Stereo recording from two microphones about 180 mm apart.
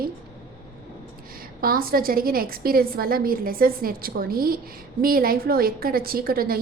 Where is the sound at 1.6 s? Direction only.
55° right (ahead or behind).